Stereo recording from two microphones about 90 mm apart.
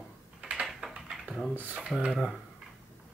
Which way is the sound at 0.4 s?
10° right (ahead or behind).